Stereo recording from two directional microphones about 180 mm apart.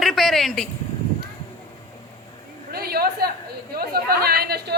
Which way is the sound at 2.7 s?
60° right (ahead or behind).